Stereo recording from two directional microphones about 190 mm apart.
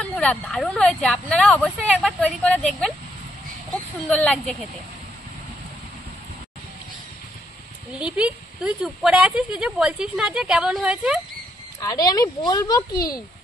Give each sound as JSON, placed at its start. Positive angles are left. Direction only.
{"t": 0.0, "sound": "speech", "side_deg": 5}
{"t": 8.0, "sound": "speech", "side_deg": -5}
{"t": 11.8, "sound": "speech", "side_deg": 20}